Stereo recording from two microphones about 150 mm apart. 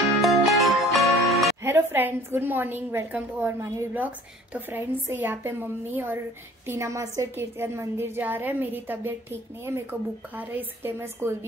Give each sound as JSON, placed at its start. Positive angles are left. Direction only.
{"t": 0.2, "sound": "music", "side_deg": 0}
{"t": 1.6, "sound": "a woman's voice", "side_deg": -15}